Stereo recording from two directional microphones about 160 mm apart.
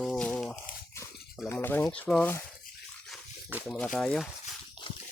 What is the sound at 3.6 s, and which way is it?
Speech, 5° left (ahead or behind).